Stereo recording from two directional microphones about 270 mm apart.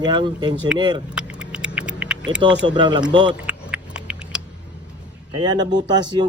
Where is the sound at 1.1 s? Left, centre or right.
Centre.